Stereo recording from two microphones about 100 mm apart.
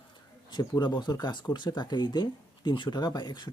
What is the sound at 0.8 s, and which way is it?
Speech, 45° left (ahead or behind).